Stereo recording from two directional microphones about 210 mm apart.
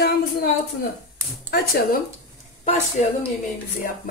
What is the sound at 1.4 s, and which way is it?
Speech, 50° left (ahead or behind).